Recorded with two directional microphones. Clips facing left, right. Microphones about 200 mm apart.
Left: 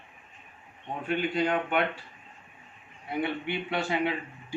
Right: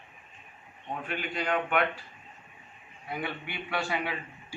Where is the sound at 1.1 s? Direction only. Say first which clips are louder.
Left 5 dB; 25° left (ahead or behind).